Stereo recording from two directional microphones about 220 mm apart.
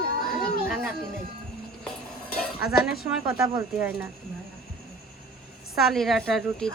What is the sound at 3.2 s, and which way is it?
Speech, 10° right (ahead or behind).